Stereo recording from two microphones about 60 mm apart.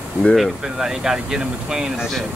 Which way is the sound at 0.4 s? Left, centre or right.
Centre.